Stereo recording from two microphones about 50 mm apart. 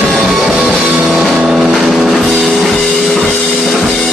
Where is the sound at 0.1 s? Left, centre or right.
Centre.